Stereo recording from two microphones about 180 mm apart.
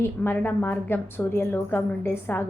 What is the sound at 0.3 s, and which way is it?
A woman's voice, 10° left (ahead or behind).